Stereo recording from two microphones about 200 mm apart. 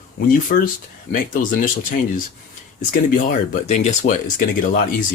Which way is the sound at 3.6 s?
35° left (ahead or behind).